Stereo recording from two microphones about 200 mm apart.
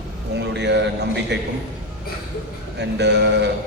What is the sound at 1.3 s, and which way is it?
Speech, 60° right (ahead or behind).